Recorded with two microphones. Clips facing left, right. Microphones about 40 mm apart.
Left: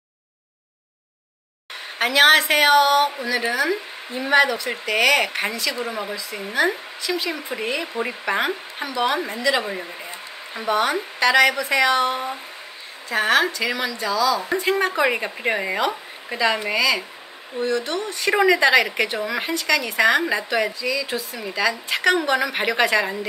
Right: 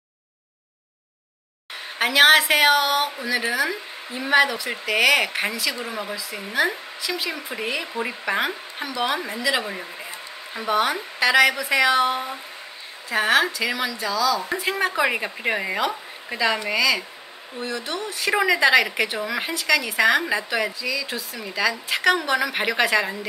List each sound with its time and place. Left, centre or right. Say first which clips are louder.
2.0 s a woman's voice: even; centre